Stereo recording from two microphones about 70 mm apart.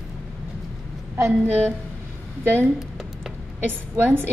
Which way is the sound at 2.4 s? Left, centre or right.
Right.